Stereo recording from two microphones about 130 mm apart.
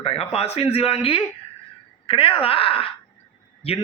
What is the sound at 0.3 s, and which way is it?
A man's voice, 50° left (ahead or behind).